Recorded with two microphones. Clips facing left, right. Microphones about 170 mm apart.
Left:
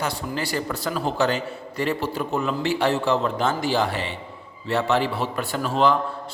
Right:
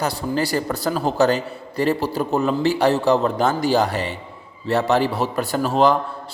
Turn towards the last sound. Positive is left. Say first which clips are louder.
# right 4 dB
turn(degrees=-40)  # may be behind; listen again after turning